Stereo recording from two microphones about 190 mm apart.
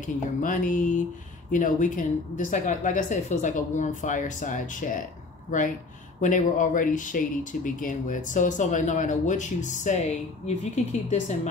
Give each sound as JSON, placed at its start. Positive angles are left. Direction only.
{"t": 0.0, "sound": "speech", "side_deg": 45}
{"t": 6.2, "sound": "speech", "side_deg": 40}